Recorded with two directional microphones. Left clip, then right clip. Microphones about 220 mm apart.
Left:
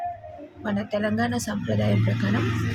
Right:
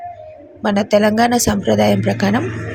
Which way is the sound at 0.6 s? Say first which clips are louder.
Right 13 dB; 30° right (ahead or behind).